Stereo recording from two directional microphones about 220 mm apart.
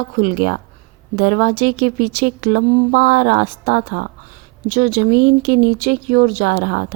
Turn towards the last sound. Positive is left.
turn(degrees=-45)  # may be behind; listen again after turning